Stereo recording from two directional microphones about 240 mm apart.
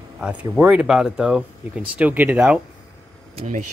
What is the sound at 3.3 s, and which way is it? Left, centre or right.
Speech, right.